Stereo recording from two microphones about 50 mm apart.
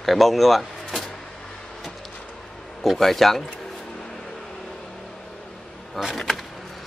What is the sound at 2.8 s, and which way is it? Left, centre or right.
Speech, centre.